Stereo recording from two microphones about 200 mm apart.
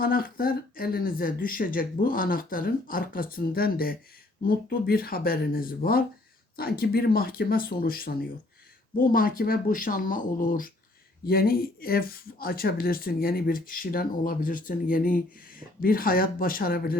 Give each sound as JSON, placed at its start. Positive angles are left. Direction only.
{"t": 0.0, "sound": "speech", "side_deg": 45}